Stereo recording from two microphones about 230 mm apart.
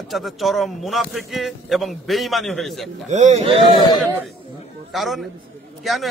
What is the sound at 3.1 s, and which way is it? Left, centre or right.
Speech, right.